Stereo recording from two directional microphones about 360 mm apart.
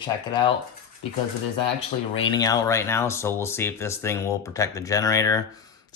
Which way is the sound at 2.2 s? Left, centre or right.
Centre.